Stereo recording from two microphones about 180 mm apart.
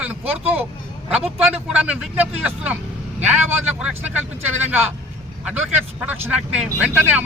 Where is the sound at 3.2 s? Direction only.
5° right (ahead or behind).